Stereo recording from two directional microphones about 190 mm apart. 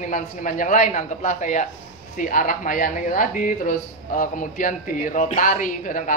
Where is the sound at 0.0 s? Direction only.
40° left (ahead or behind).